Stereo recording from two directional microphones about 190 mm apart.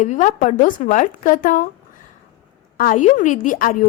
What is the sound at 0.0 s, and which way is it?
A woman's voice, 40° left (ahead or behind).